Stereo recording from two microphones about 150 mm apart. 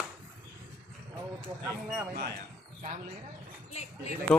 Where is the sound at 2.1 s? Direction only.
90° right.